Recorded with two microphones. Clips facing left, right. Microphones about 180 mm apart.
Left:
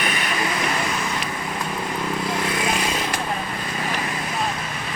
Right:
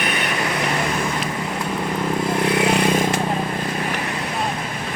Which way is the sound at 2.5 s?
65° right (ahead or behind).